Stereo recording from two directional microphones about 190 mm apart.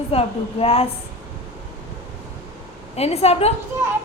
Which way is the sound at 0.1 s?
30° left (ahead or behind).